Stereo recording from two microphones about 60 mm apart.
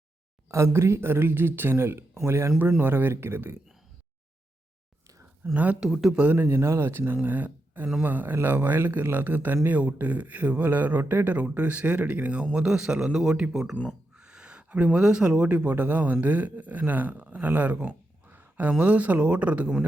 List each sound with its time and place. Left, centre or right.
0.5 s speech: right
2.6 s a man's voice: right
5.4 s a man's voice: right
5.8 s speech: centre
6.3 s a man's voice: right
7.2 s a man's voice: right
12.5 s speech: centre